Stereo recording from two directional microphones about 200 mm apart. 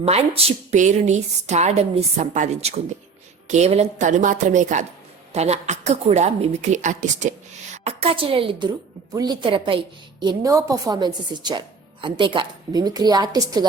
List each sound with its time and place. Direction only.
0.0 s a woman's voice: 30° right (ahead or behind)